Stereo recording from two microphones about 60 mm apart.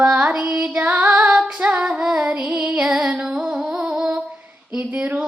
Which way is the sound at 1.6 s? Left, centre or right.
Right.